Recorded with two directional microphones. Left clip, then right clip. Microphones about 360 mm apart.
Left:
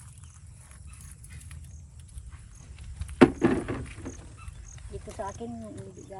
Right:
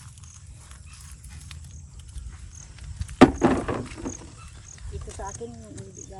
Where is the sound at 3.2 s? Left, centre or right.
Centre.